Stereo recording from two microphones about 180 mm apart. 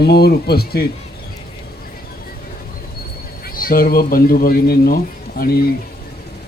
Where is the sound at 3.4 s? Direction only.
55° left (ahead or behind).